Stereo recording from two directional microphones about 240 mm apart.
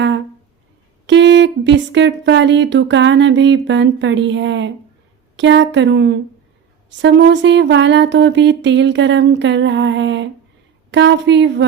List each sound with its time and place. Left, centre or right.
1.0 s speech: right